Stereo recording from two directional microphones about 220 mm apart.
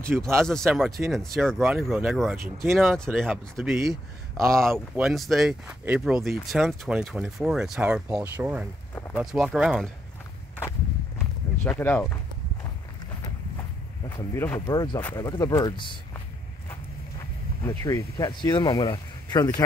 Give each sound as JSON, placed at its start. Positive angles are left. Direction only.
{"t": 0.4, "sound": "speech", "side_deg": 0}
{"t": 11.1, "sound": "a sound", "side_deg": 10}
{"t": 13.6, "sound": "speech", "side_deg": 15}
{"t": 17.6, "sound": "speech", "side_deg": 15}